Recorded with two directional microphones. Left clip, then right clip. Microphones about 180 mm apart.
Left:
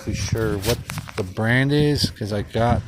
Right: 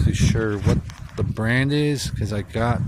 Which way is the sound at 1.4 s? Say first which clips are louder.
Left 2 dB; 10° right (ahead or behind).